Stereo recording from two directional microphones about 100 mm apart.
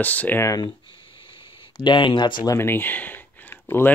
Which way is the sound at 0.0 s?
15° left (ahead or behind).